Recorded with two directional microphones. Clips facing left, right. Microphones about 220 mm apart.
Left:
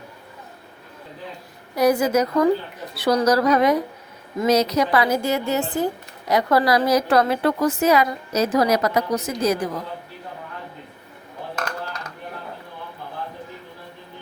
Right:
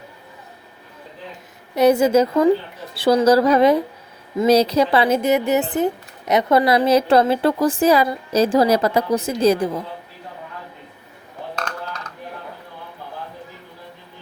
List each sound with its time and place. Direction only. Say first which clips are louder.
1.7 s speech: right 4 dB; 25° right (ahead or behind)